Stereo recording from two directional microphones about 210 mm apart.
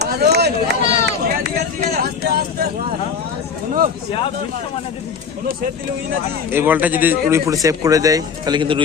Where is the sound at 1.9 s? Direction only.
45° right (ahead or behind).